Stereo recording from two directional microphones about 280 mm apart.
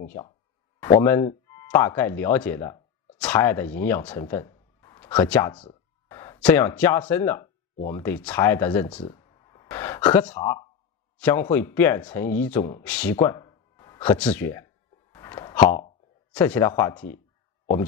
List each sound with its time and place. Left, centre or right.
0.0 s speech: centre
8.8 s a sound: centre
11.1 s a man's voice: centre
15.1 s plop: centre
16.3 s speech: centre